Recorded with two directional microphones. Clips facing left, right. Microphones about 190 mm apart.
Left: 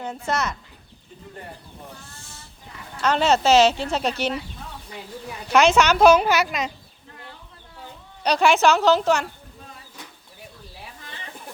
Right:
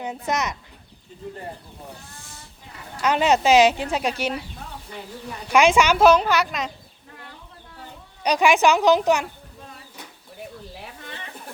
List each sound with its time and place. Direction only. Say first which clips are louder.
0.3 s a woman's voice: even; 15° right (ahead or behind)
3.0 s a woman's voice: even; 10° right (ahead or behind)
5.5 s a woman's voice: even; 10° right (ahead or behind)
6.1 s a woman's voice: left 1 dB; 5° left (ahead or behind)
8.2 s a woman's voice: even; 10° right (ahead or behind)